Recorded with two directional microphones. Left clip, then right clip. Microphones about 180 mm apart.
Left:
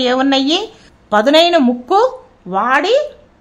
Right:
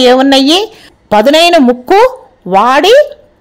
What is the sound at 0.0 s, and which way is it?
A woman's voice, 20° right (ahead or behind).